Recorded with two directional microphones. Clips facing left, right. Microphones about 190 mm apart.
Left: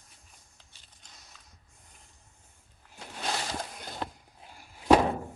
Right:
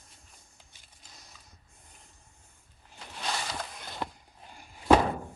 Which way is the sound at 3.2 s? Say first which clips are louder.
Left 1 dB; 45° left (ahead or behind).